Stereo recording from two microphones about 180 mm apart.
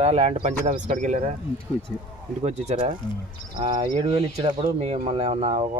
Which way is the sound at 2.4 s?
35° right (ahead or behind).